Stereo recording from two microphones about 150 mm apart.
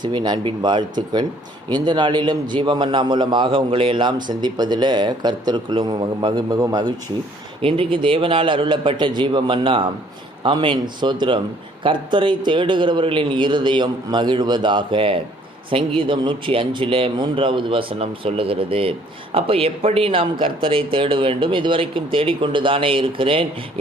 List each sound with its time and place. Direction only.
0.0 s speech: 30° right (ahead or behind)
7.6 s speech: 35° right (ahead or behind)